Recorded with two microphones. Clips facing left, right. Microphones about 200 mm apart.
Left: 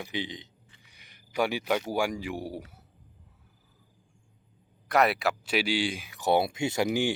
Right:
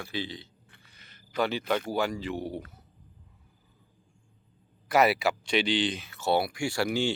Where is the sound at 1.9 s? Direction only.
15° left (ahead or behind).